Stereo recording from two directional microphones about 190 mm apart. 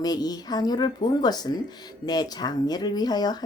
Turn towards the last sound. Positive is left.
turn(degrees=20)  # may be behind; listen again after turning